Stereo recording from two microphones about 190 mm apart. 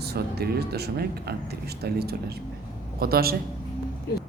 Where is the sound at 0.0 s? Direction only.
60° right (ahead or behind).